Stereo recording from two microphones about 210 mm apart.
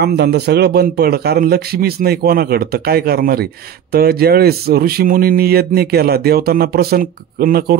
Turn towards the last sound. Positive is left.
turn(degrees=-45)  # may be behind; listen again after turning